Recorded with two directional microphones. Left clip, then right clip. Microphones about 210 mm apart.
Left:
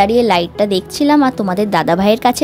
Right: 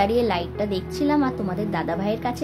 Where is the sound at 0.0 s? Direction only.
35° left (ahead or behind).